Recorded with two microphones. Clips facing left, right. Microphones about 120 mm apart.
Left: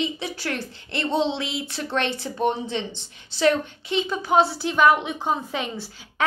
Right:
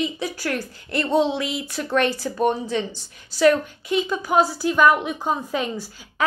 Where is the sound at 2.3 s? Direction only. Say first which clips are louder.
Right 4 dB; 65° right (ahead or behind).